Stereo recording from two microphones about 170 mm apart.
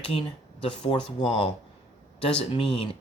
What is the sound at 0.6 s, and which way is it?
Speech, 30° left (ahead or behind).